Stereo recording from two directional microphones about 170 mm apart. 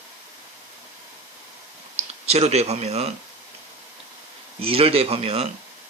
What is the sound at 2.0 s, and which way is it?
Speech, 40° right (ahead or behind).